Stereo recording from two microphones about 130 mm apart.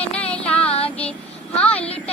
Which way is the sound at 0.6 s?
50° left (ahead or behind).